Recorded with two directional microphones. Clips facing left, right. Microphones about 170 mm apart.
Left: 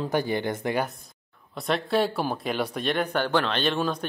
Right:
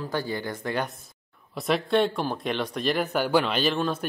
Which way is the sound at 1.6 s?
Centre (ahead or behind).